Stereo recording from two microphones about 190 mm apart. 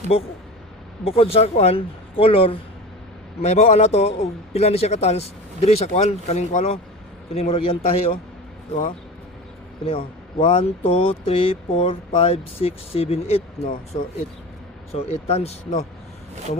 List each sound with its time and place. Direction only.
1.0 s speech: 30° left (ahead or behind)
9.8 s speech: 30° left (ahead or behind)